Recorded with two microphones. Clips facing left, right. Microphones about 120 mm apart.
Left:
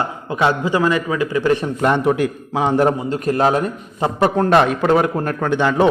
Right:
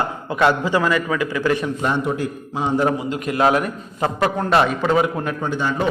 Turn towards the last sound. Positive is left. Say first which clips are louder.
# left 6 dB
turn(degrees=80)